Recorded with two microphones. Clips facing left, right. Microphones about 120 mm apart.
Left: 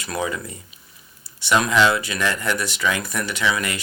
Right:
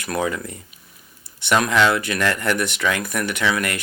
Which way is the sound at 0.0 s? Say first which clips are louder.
Right 2 dB; 55° right (ahead or behind).